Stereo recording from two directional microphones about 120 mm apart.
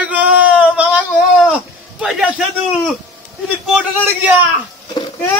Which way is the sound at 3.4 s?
5° right (ahead or behind).